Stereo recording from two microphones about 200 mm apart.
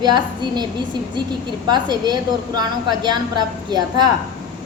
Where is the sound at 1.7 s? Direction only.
20° right (ahead or behind).